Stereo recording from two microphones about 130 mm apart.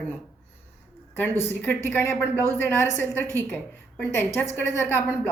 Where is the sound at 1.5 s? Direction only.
15° left (ahead or behind).